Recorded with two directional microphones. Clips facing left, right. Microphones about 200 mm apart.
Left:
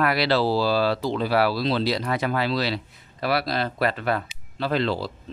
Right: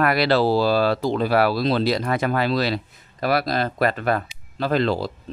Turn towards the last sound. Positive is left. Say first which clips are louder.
# right 3 dB
turn(degrees=-45)  # may be behind; listen again after turning